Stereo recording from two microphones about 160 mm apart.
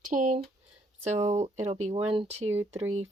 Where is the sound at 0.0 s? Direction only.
50° right (ahead or behind).